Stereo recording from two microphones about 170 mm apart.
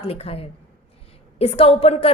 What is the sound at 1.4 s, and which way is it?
Speech, 35° left (ahead or behind).